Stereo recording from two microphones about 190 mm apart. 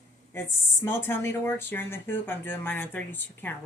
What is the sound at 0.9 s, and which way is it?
Speech, 10° left (ahead or behind).